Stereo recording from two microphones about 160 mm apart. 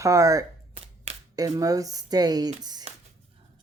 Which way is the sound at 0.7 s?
40° right (ahead or behind).